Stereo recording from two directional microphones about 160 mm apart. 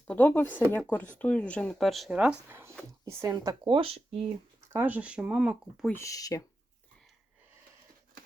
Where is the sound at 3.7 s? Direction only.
35° right (ahead or behind).